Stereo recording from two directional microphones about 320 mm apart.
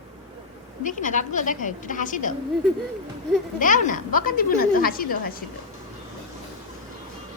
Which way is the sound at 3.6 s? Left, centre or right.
Left.